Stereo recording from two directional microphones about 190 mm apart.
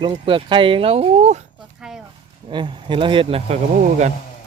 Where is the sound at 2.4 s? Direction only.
25° right (ahead or behind).